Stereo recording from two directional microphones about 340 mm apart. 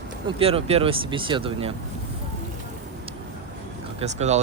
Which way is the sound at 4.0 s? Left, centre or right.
Centre.